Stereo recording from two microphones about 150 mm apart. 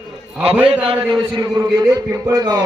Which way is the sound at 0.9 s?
35° right (ahead or behind).